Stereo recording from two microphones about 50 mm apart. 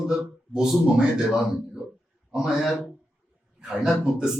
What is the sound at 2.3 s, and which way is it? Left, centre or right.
Speech, centre.